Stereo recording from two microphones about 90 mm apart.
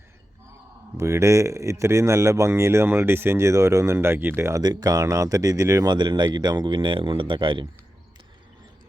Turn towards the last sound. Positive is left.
turn(degrees=-65)  # may be behind; listen again after turning